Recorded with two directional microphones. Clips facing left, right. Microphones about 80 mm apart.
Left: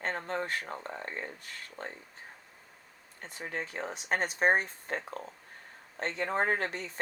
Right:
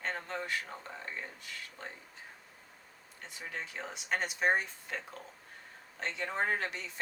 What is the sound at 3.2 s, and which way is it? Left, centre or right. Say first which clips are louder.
Speech: left 4 dB; left.